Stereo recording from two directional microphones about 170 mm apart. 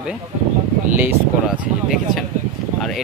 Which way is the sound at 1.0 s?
10° right (ahead or behind).